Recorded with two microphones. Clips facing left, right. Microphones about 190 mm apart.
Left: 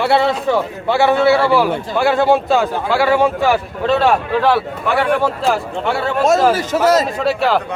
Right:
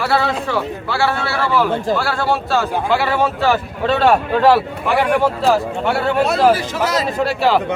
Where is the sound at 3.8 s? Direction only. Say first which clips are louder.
Even; centre (ahead or behind).